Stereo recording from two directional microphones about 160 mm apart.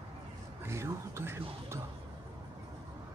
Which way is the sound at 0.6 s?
20° right (ahead or behind).